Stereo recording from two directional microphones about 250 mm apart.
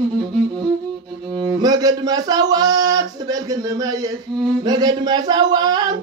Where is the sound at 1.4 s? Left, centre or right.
Centre.